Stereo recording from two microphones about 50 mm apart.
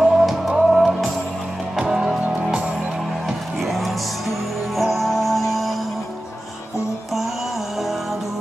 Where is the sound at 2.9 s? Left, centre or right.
Centre.